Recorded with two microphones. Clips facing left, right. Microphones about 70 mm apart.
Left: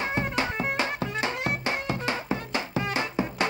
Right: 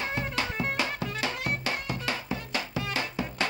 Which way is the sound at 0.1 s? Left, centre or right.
Left.